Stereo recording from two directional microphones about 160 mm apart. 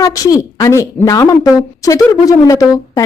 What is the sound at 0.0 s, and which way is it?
A woman's voice, 20° left (ahead or behind).